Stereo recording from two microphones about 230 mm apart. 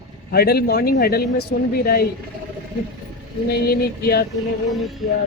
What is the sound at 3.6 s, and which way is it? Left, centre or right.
Speech, left.